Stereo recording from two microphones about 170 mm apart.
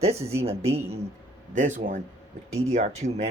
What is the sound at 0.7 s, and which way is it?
Speech, 15° right (ahead or behind).